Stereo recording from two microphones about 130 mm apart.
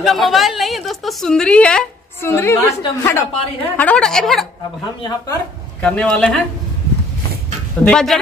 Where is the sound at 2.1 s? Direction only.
20° left (ahead or behind).